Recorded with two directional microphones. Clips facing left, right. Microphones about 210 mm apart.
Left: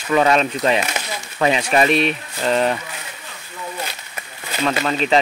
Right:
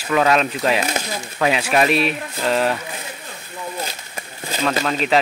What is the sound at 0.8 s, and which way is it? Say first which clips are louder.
Speech: right 3 dB; 40° right (ahead or behind).